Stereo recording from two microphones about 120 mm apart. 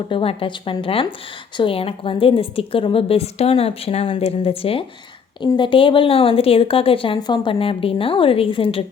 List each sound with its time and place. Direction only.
0.1 s a woman's voice: 50° left (ahead or behind)